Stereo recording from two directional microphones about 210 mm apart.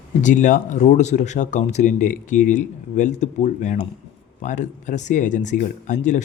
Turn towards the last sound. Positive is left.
turn(degrees=35)  # may be behind; listen again after turning